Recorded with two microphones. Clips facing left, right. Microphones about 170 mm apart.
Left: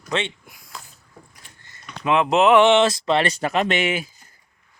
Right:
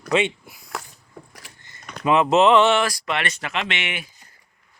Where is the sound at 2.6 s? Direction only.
20° left (ahead or behind).